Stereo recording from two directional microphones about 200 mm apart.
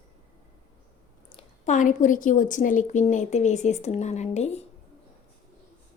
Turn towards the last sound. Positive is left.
turn(degrees=35)  # may be behind; listen again after turning